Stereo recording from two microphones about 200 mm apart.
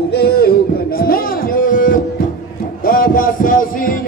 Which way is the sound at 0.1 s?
50° left (ahead or behind).